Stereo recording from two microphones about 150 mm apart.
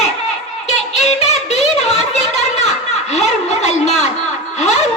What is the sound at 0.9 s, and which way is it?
Music, 45° left (ahead or behind).